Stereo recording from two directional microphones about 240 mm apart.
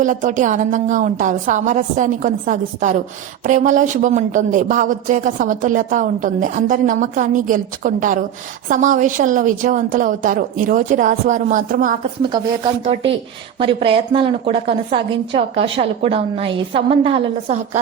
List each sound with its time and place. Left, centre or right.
0.0 s speech: right
12.2 s a woman's voice: centre